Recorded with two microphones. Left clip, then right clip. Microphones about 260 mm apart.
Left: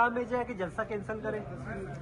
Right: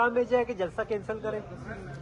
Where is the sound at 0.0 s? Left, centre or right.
Right.